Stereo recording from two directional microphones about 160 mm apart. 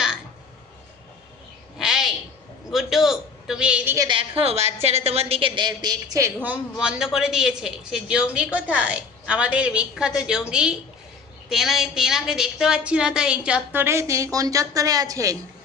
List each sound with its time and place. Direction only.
1.8 s a sound: centre (ahead or behind)
2.7 s a man's voice: centre (ahead or behind)
3.9 s a woman's voice: 20° right (ahead or behind)
4.2 s a woman's voice: 40° right (ahead or behind); by 15.4 s 20° right (ahead or behind)